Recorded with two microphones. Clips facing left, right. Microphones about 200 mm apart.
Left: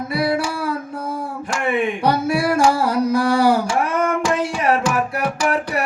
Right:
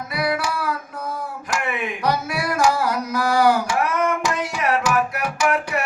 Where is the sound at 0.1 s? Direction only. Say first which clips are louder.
Left 3 dB; 30° left (ahead or behind).